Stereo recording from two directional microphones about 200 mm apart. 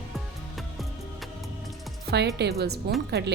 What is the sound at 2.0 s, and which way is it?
Speech, 55° right (ahead or behind).